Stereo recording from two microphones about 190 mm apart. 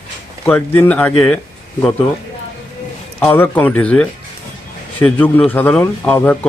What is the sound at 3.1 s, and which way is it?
A man's voice, 5° left (ahead or behind).